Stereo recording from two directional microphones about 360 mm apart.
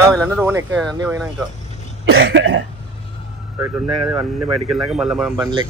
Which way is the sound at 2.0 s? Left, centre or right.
Right.